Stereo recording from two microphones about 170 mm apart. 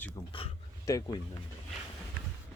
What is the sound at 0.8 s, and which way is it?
Speech, 20° left (ahead or behind).